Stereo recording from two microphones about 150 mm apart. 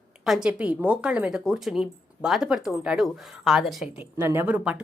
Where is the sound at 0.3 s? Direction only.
5° right (ahead or behind).